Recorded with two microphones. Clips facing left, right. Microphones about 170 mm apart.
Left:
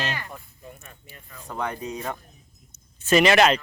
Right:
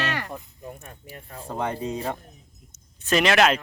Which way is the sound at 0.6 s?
55° right (ahead or behind).